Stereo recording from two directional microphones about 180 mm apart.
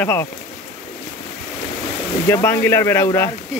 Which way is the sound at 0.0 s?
15° left (ahead or behind).